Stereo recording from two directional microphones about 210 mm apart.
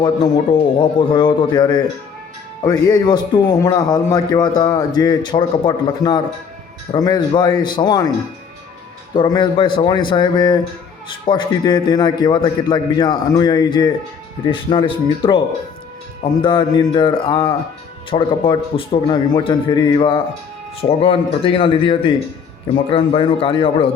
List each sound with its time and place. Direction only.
0.8 s a man's voice: 20° left (ahead or behind)
9.1 s a man's voice: 20° left (ahead or behind)